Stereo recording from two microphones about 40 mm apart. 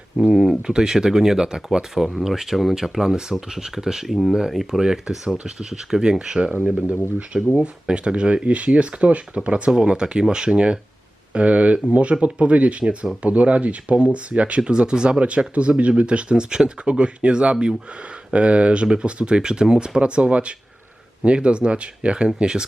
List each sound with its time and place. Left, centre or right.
0.3 s speech: centre
4.0 s speech: centre
4.3 s speech: centre
7.3 s speech: centre
7.6 s speech: right
11.3 s speech: right